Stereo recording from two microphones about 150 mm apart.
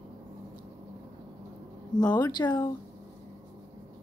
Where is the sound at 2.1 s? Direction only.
30° left (ahead or behind).